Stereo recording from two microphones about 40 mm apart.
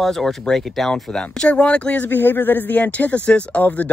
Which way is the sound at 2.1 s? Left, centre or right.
Left.